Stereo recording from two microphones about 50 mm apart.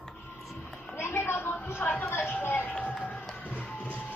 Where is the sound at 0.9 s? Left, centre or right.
Left.